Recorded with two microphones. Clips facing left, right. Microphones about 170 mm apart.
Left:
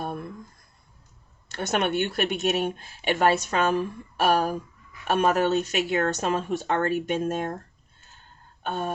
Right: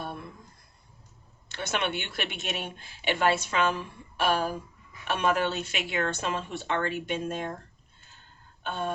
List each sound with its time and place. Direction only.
1.5 s speech: 45° left (ahead or behind)
8.6 s throat clearing: 45° left (ahead or behind)